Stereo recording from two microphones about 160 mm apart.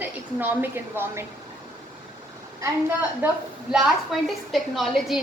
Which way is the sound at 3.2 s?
10° right (ahead or behind).